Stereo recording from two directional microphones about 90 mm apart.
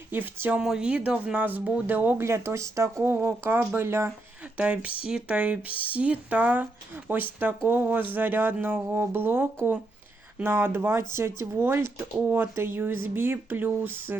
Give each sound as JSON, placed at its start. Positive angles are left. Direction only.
{"t": 0.1, "sound": "speech", "side_deg": -25}
{"t": 0.6, "sound": "speech", "side_deg": -10}
{"t": 4.5, "sound": "speech", "side_deg": -15}